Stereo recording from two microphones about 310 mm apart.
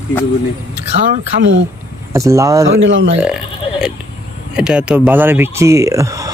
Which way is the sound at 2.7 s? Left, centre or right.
Right.